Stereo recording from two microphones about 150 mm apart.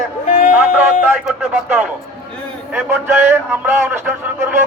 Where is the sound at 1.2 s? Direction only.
5° right (ahead or behind).